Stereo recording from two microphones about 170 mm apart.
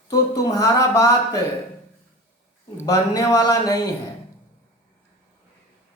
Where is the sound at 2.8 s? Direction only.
20° left (ahead or behind).